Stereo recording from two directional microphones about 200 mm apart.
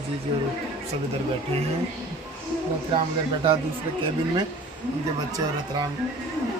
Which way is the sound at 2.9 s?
25° right (ahead or behind).